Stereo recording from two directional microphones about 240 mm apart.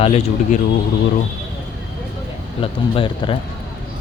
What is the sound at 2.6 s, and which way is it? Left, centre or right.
Speech, left.